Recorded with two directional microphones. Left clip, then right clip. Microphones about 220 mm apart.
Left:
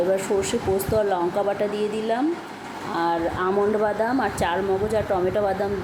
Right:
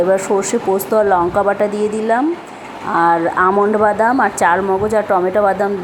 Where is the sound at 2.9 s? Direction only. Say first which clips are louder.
Right 10 dB; 15° right (ahead or behind).